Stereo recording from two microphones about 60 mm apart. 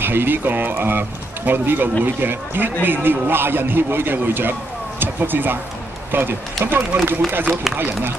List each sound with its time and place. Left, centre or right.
0.0 s speech: right